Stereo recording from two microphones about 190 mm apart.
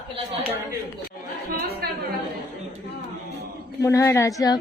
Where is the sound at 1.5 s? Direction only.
55° right (ahead or behind).